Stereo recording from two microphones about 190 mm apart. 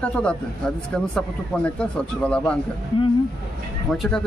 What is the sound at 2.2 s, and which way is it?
Speech, 5° left (ahead or behind).